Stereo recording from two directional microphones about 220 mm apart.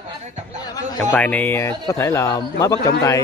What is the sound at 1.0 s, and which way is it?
A man's voice, 5° left (ahead or behind).